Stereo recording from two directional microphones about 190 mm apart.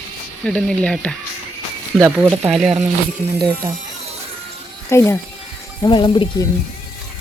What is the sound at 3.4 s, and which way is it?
Speech, 25° right (ahead or behind).